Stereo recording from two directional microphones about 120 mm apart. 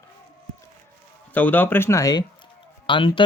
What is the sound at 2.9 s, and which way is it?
Speech, 45° left (ahead or behind).